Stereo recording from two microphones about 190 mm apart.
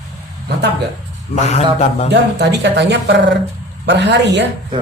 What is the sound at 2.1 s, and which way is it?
Speech, 65° right (ahead or behind).